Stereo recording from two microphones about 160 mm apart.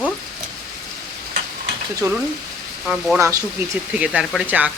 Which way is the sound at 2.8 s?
Centre (ahead or behind).